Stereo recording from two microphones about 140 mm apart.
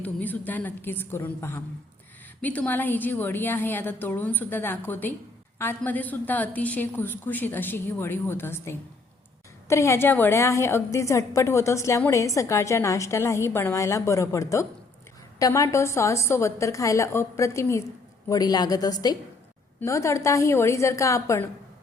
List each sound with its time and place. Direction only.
0.0 s a woman's voice: 10° left (ahead or behind)